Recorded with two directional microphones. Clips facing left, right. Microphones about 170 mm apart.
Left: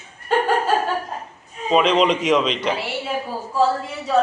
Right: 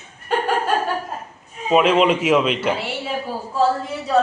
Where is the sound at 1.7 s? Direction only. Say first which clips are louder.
Right 1 dB; 5° right (ahead or behind).